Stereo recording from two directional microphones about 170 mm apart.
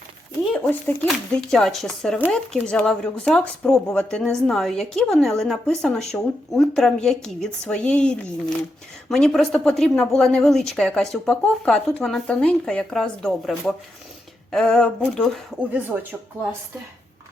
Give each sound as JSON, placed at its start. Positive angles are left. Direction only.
{"t": 0.5, "sound": "a woman's voice", "side_deg": 5}